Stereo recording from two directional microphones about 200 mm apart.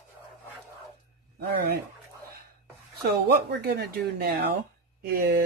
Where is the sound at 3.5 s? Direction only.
50° right (ahead or behind).